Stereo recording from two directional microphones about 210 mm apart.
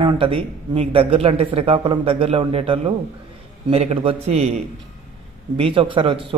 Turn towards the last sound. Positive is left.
turn(degrees=-25)  # may be behind; listen again after turning